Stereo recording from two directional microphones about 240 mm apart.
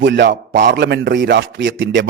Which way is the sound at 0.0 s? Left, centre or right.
Right.